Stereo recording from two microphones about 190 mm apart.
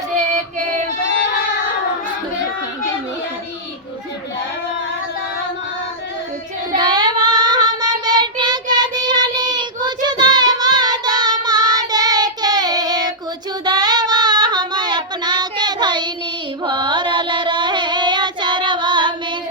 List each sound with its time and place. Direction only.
6.7 s child singing: 20° right (ahead or behind)